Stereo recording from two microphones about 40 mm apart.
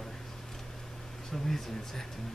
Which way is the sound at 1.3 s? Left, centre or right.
Centre.